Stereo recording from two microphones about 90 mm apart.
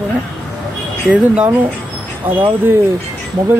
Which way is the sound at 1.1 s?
15° right (ahead or behind).